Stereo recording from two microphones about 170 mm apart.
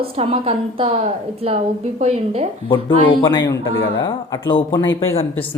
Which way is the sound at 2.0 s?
35° right (ahead or behind).